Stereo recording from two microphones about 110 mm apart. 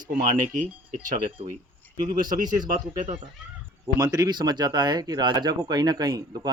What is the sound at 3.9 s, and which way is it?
Speech, 35° right (ahead or behind).